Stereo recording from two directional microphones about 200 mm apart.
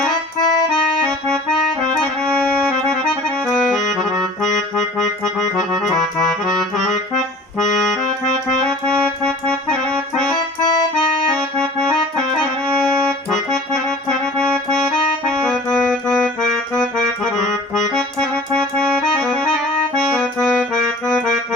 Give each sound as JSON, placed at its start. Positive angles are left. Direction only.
{"t": 0.1, "sound": "accordion", "side_deg": 20}
{"t": 1.3, "sound": "accordion", "side_deg": 0}
{"t": 7.8, "sound": "music", "side_deg": 0}
{"t": 10.3, "sound": "accordion", "side_deg": 20}
{"t": 12.4, "sound": "accordion", "side_deg": 0}